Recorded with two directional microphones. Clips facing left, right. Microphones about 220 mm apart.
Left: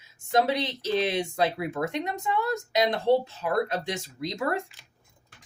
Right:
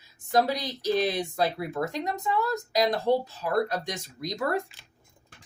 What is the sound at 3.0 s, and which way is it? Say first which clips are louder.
Speech: left 2 dB; 25° left (ahead or behind).